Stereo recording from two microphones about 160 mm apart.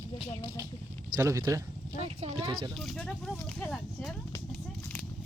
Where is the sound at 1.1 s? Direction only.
20° right (ahead or behind).